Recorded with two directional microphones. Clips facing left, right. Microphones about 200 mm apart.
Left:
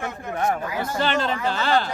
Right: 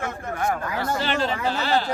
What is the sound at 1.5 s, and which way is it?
Speech, 55° left (ahead or behind).